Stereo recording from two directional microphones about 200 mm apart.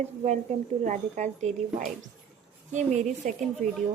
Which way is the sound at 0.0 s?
35° right (ahead or behind).